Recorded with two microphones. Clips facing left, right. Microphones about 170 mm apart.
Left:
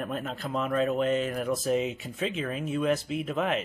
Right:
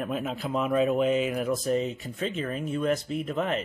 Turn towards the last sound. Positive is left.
turn(degrees=0)  # may be behind; listen again after turning